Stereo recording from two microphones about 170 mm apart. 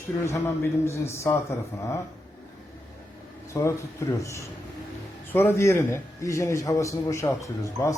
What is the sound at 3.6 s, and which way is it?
A man's voice, 15° left (ahead or behind).